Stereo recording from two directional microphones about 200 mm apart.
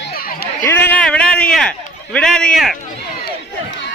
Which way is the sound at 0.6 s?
10° left (ahead or behind).